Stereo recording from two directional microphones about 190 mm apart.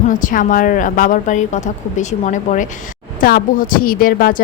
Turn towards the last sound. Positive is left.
turn(degrees=50)  # may be behind; listen again after turning